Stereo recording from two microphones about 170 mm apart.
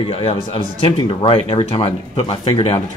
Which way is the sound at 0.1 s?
30° left (ahead or behind).